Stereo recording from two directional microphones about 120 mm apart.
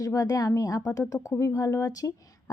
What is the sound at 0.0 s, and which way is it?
Speech, 30° left (ahead or behind).